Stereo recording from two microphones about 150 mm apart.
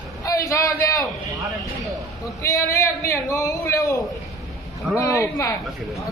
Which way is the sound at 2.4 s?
20° left (ahead or behind).